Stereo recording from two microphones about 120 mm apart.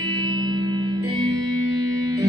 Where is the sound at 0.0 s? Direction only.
35° right (ahead or behind).